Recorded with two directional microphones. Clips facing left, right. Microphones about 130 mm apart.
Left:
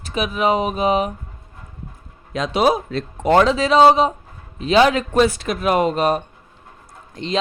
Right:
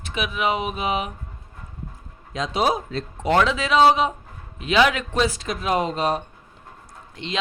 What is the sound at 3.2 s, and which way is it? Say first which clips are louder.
Speech: left 5 dB; 40° left (ahead or behind).